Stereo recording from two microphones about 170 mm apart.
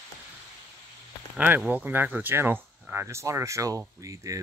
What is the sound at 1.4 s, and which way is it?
Speech, 10° right (ahead or behind).